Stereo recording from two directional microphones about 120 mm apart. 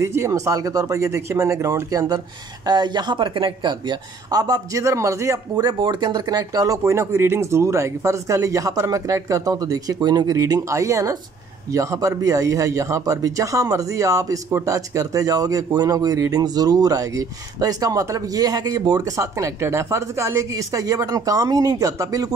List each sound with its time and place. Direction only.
0.0 s speech: 25° right (ahead or behind)
5.7 s speech: 40° right (ahead or behind)